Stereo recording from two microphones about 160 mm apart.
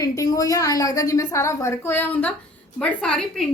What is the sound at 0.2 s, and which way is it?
A woman's voice, 20° left (ahead or behind).